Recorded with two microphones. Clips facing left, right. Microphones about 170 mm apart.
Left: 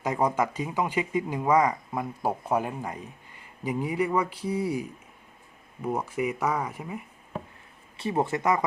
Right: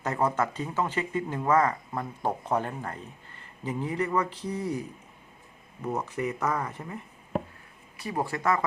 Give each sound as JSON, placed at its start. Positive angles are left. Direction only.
{"t": 0.0, "sound": "speech", "side_deg": 15}
{"t": 7.9, "sound": "speech", "side_deg": 25}